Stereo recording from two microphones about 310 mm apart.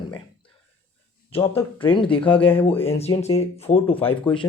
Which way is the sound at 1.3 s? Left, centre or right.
Centre.